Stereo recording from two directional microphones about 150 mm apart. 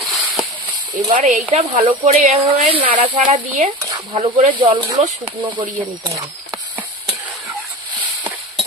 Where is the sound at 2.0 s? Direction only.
45° right (ahead or behind).